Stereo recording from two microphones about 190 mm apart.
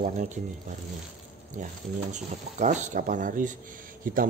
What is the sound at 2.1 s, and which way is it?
Speech, 40° right (ahead or behind).